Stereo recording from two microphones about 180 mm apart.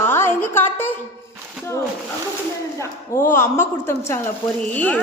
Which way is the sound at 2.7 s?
15° left (ahead or behind).